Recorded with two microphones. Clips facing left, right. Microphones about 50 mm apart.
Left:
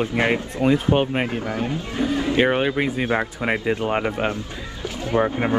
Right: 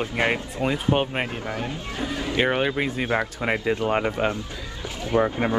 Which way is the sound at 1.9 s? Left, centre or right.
Left.